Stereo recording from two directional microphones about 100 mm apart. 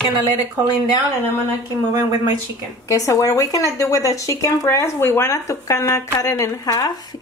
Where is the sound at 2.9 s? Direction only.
35° left (ahead or behind).